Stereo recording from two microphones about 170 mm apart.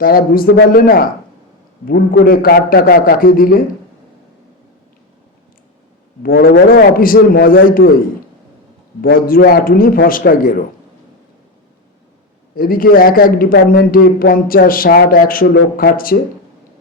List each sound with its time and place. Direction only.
0.0 s a man's voice: 60° left (ahead or behind)
6.2 s a man's voice: 60° left (ahead or behind)
12.5 s a man's voice: 60° left (ahead or behind)